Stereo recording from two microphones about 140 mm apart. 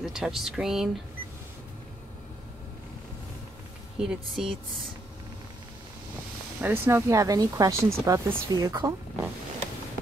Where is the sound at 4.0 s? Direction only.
5° right (ahead or behind).